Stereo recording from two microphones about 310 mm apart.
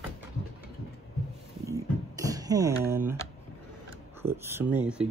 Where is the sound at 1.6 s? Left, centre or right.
Centre.